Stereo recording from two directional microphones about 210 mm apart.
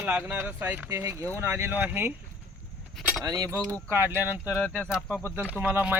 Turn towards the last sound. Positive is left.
turn(degrees=-5)  # may be behind; listen again after turning